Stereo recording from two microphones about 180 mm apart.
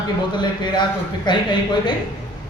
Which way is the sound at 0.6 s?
25° left (ahead or behind).